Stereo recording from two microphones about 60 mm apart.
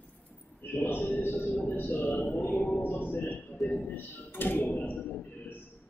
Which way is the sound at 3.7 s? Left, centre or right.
Left.